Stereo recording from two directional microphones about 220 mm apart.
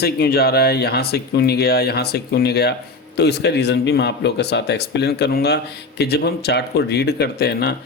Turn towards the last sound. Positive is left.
turn(degrees=45)  # may be behind; listen again after turning